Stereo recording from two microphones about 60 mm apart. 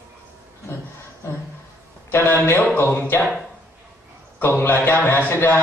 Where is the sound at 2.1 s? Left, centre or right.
Left.